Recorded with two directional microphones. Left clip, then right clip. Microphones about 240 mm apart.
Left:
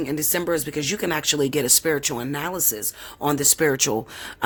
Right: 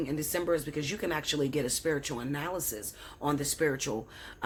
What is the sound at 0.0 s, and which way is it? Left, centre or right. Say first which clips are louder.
Speech: left 7 dB; left.